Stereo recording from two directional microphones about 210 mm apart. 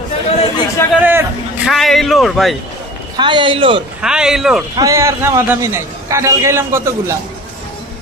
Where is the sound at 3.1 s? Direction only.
20° right (ahead or behind).